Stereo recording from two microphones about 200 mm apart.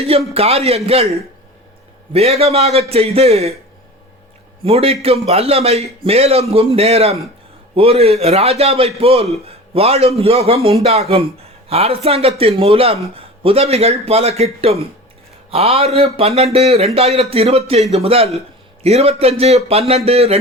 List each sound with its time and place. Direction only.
0.3 s a man's voice: 30° right (ahead or behind)
4.6 s a man's voice: 30° right (ahead or behind)